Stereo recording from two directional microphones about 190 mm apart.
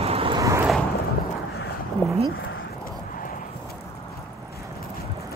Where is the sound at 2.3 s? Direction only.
90° left.